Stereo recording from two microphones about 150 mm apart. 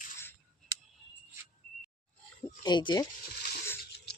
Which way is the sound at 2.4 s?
30° left (ahead or behind).